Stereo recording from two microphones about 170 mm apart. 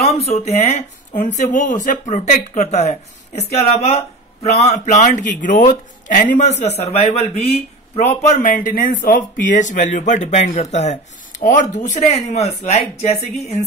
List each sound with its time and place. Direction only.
0.0 s speech: 35° left (ahead or behind)